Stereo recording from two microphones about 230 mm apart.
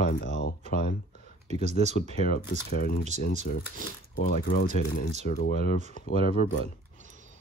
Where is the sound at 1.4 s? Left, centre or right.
Right.